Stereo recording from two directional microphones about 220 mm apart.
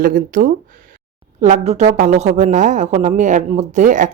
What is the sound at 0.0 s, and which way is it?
Speech, 40° right (ahead or behind).